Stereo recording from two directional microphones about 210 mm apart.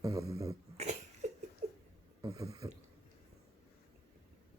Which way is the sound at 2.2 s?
15° right (ahead or behind).